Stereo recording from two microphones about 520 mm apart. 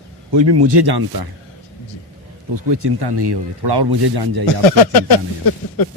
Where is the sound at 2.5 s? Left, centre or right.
Right.